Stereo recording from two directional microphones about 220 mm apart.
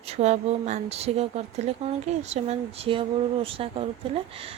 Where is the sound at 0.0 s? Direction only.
30° right (ahead or behind).